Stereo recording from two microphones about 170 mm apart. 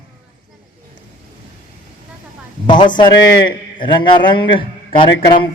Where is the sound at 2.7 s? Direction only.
25° left (ahead or behind).